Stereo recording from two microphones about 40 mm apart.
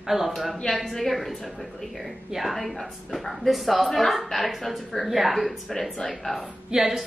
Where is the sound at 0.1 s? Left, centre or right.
Centre.